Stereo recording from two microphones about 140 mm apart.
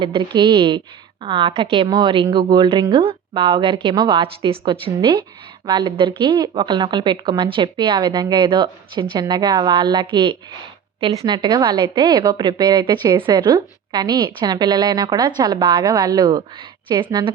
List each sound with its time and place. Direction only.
0.0 s a woman's voice: 35° right (ahead or behind)
11.3 s a woman's voice: 30° right (ahead or behind)